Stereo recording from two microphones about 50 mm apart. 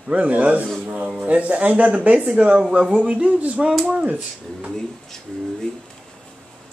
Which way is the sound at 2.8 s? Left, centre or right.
Centre.